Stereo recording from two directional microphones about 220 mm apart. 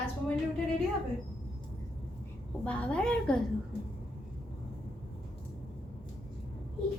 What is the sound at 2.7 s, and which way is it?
Speech, 5° left (ahead or behind).